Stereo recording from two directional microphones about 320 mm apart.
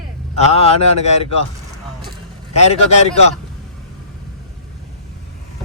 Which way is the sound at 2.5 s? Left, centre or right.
Centre.